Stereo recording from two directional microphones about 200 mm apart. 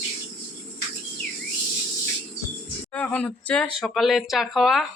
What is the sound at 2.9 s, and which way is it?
Speech, 5° left (ahead or behind).